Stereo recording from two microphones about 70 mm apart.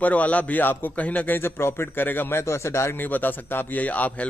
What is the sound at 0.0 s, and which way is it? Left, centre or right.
A man's voice, left.